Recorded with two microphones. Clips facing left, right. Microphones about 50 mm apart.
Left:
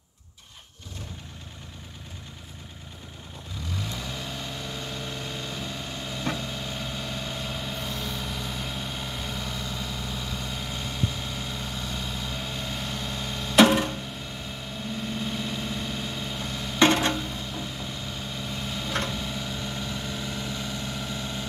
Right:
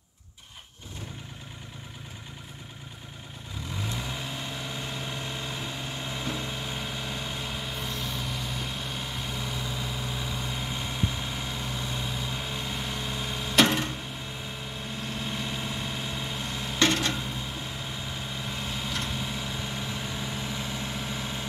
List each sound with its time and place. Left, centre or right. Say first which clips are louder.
3.7 s vehicle: even; centre
16.8 s a sound: left 5 dB; left
17.2 s vehicle: left 1 dB; centre